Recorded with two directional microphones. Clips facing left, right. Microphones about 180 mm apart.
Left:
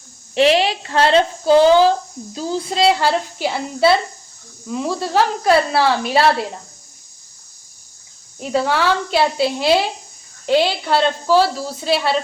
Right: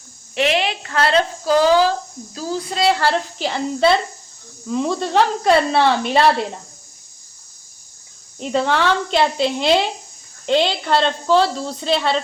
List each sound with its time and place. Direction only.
0.3 s a woman's voice: 35° left (ahead or behind); by 6.3 s 5° left (ahead or behind)
8.4 s a woman's voice: 5° left (ahead or behind)